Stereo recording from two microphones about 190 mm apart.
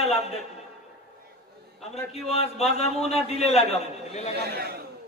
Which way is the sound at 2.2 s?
35° left (ahead or behind).